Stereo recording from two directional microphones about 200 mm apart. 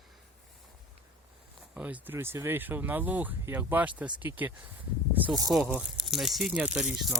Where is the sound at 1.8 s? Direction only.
5° right (ahead or behind).